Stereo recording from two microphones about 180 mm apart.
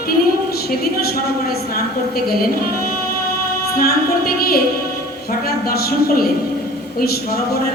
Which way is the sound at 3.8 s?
55° left (ahead or behind).